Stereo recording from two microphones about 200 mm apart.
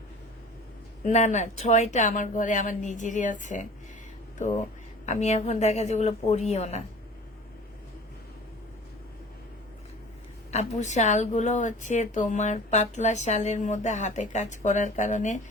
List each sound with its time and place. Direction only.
1.0 s speech: 35° left (ahead or behind)
5.0 s speech: 35° left (ahead or behind)
10.5 s speech: 35° left (ahead or behind)